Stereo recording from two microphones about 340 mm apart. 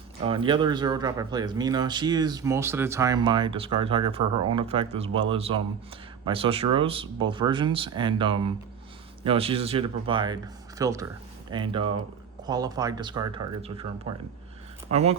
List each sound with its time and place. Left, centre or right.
0.3 s speech: centre